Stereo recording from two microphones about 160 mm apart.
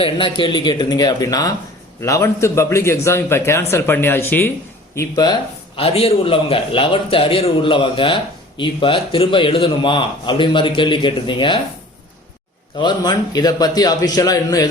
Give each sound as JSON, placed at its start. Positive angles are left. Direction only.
{"t": 0.0, "sound": "a man's voice", "side_deg": 35}
{"t": 4.9, "sound": "a man's voice", "side_deg": 25}
{"t": 5.7, "sound": "a man's voice", "side_deg": 40}
{"t": 12.7, "sound": "a man's voice", "side_deg": 30}